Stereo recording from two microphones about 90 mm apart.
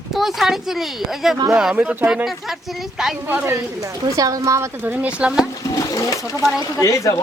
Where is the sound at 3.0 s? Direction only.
5° right (ahead or behind).